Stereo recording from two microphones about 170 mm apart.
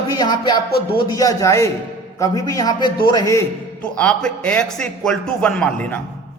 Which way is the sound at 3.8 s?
5° left (ahead or behind).